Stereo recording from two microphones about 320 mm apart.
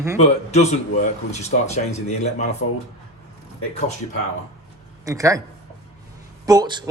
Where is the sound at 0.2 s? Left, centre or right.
Left.